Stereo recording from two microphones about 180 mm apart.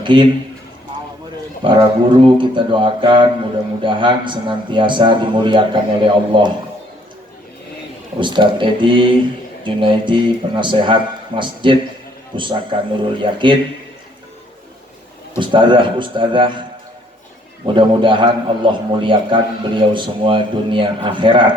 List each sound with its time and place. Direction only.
0.0 s a man's voice: 25° right (ahead or behind)
1.6 s a man's voice: 25° right (ahead or behind)
8.2 s a man's voice: 25° right (ahead or behind)
15.4 s a man's voice: 25° right (ahead or behind)
17.7 s a man's voice: 25° right (ahead or behind)